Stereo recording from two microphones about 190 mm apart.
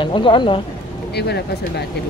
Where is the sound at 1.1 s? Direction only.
60° left (ahead or behind).